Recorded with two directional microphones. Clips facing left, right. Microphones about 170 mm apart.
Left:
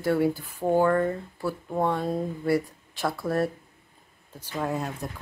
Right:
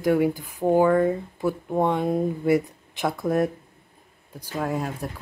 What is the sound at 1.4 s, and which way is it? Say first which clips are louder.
A woman's voice: right 4 dB; 20° right (ahead or behind).